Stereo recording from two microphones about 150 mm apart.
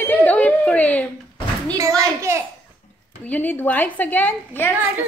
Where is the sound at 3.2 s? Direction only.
10° left (ahead or behind).